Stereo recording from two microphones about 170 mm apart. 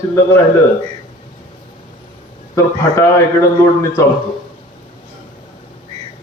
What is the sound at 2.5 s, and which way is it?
A man's voice, 15° left (ahead or behind).